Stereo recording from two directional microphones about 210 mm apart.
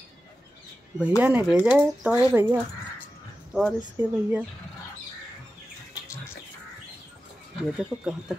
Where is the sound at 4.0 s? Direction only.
10° right (ahead or behind).